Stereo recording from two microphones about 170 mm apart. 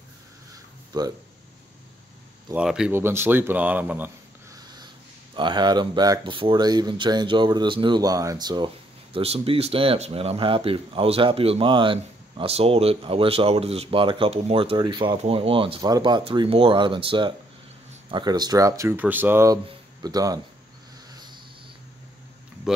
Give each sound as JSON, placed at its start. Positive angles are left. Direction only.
{"t": 0.9, "sound": "speech", "side_deg": -25}
{"t": 2.5, "sound": "speech", "side_deg": -5}
{"t": 5.3, "sound": "speech", "side_deg": -25}
{"t": 21.1, "sound": "a sound", "side_deg": -25}